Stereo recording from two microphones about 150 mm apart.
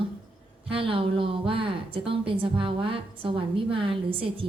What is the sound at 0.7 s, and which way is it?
A woman's voice, 35° right (ahead or behind).